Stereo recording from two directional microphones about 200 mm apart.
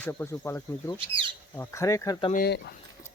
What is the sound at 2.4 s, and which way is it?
Speech, 55° left (ahead or behind).